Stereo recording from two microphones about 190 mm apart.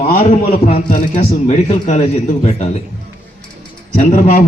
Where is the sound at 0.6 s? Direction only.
30° left (ahead or behind).